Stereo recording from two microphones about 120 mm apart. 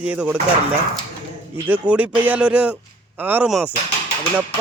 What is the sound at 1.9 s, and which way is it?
Speech, 15° right (ahead or behind).